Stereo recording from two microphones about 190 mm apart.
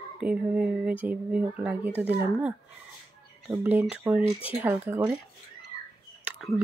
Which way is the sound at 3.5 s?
10° right (ahead or behind).